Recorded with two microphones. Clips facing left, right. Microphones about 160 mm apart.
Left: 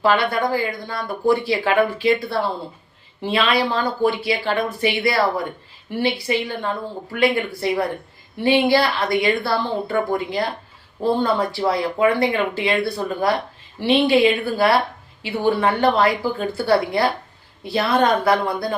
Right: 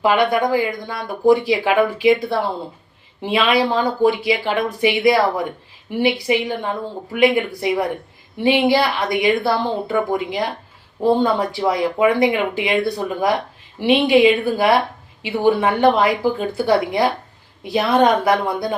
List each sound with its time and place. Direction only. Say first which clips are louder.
0.0 s speech: right 2 dB; 15° right (ahead or behind)